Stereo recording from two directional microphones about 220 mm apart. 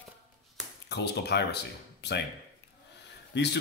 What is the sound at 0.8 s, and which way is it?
Speech, 50° left (ahead or behind).